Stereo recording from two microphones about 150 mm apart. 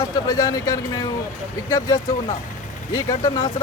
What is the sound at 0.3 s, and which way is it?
Speech, 25° left (ahead or behind).